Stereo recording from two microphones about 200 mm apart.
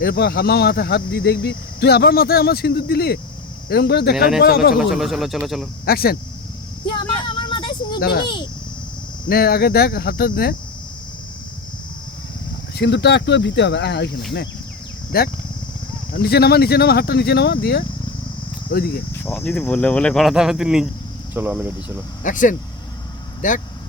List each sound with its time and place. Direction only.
0.0 s speech: 50° left (ahead or behind)
4.1 s speech: 5° right (ahead or behind)
4.4 s speech: 50° left (ahead or behind)
4.7 s speech: centre (ahead or behind)
5.8 s speech: 50° left (ahead or behind)
7.3 s vehicle: 25° left (ahead or behind)
7.9 s speech: 50° left (ahead or behind)
9.3 s speech: 50° left (ahead or behind)
12.7 s speech: 55° left (ahead or behind)
15.1 s speech: 50° left (ahead or behind)
19.2 s speech: 10° left (ahead or behind); by 21.9 s 10° right (ahead or behind)
22.2 s speech: 40° left (ahead or behind)